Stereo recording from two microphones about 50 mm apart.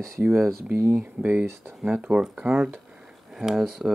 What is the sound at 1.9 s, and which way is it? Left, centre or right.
Speech, centre.